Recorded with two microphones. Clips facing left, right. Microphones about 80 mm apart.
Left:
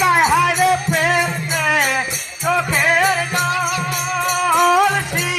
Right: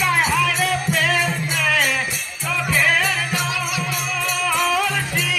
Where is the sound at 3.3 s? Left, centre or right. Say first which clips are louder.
Left 5 dB; left.